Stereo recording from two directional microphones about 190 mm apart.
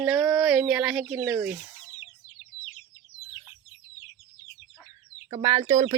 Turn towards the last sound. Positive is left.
turn(degrees=-25)  # may be behind; listen again after turning